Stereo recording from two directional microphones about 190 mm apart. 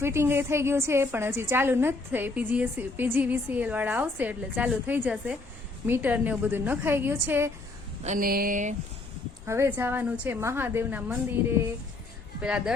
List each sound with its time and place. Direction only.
0.0 s a woman's voice: 15° right (ahead or behind)
8.0 s speech: 45° right (ahead or behind)
9.5 s a woman's voice: 10° right (ahead or behind)
12.4 s a woman's voice: 5° right (ahead or behind)